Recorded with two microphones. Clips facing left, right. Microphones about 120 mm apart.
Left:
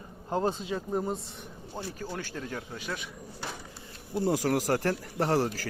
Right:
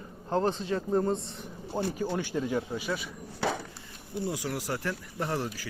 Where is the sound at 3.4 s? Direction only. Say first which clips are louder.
Right 10 dB; 90° right.